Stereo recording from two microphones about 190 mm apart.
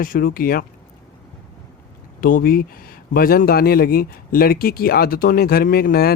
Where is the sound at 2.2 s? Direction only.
50° left (ahead or behind).